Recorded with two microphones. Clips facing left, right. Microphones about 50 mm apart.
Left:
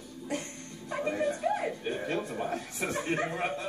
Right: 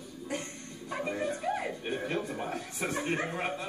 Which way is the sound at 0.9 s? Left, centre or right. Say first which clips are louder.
Left 3 dB; centre.